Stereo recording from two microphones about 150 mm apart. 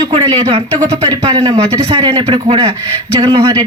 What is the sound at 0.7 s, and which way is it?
A man's voice, 25° right (ahead or behind).